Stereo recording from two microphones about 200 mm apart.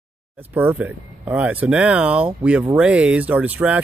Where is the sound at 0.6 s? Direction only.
10° right (ahead or behind).